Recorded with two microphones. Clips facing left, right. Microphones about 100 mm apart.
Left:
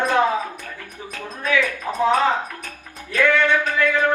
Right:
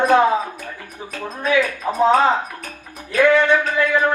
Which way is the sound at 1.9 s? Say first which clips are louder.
Right 3 dB; 20° right (ahead or behind).